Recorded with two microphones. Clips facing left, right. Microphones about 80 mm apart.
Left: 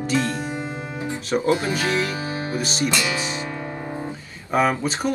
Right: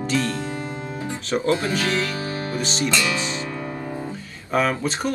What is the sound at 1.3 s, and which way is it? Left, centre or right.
Speech, centre.